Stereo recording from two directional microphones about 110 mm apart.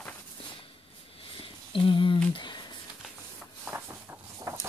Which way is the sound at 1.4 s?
50° left (ahead or behind).